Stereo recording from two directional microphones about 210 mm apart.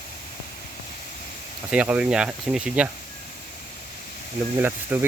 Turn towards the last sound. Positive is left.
turn(degrees=-10)  # may be behind; listen again after turning